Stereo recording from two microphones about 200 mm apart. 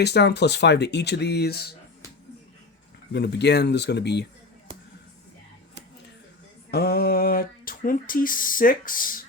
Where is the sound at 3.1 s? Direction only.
55° left (ahead or behind).